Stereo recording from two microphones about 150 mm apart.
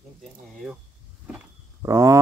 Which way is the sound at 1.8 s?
20° right (ahead or behind).